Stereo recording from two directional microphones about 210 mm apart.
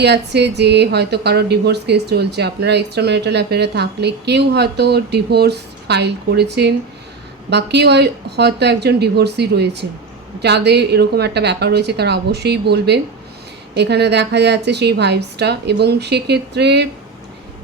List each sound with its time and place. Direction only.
0.0 s speech: 55° right (ahead or behind)